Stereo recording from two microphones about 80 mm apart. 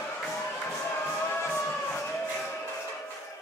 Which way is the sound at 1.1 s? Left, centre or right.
Left.